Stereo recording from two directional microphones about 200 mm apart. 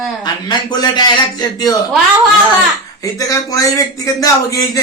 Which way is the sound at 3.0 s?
15° left (ahead or behind).